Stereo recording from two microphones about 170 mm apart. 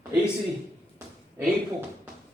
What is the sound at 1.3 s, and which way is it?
Speech, 10° right (ahead or behind).